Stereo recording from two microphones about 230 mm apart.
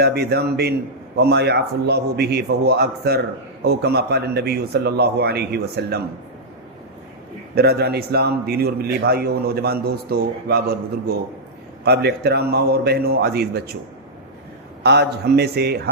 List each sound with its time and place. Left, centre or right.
0.0 s a man's voice: right
7.5 s a man's voice: right
11.9 s a man's voice: right
14.8 s a man's voice: right